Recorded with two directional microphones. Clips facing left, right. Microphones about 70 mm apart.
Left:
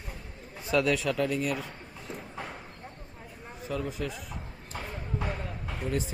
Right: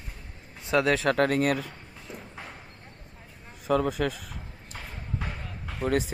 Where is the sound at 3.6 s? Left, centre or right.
Right.